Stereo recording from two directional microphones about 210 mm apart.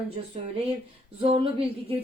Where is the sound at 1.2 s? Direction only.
25° right (ahead or behind).